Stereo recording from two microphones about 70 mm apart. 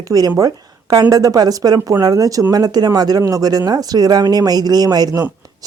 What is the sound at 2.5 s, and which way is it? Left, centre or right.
Speech, right.